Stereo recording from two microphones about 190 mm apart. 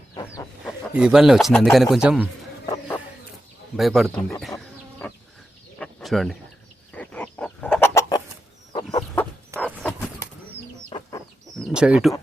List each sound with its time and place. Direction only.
0.6 s a man's voice: 5° right (ahead or behind)
3.8 s speech: centre (ahead or behind)
4.5 s chicken: 10° left (ahead or behind)
5.8 s chicken: centre (ahead or behind)
8.7 s chicken: 25° left (ahead or behind)
9.6 s dog: 5° left (ahead or behind)
10.8 s chicken: 25° left (ahead or behind)
11.6 s bird: 5° right (ahead or behind)